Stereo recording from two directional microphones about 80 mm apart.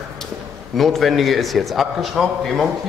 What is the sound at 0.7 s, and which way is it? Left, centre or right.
A man's voice, centre.